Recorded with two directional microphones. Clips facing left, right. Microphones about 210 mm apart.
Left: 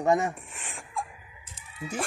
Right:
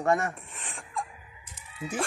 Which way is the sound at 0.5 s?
Centre (ahead or behind).